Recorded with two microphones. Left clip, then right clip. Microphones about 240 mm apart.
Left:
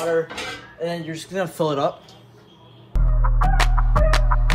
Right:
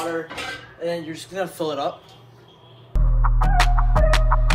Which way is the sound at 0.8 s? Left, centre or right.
Left.